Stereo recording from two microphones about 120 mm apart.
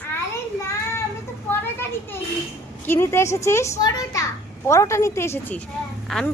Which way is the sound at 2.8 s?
20° left (ahead or behind).